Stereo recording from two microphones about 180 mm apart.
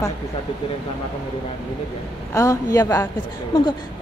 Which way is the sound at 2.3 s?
20° left (ahead or behind).